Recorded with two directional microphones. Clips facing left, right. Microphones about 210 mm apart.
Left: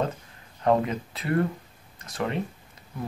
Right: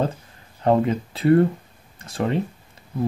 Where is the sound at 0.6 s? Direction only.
30° right (ahead or behind).